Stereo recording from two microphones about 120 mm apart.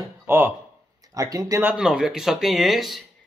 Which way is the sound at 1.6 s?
5° right (ahead or behind).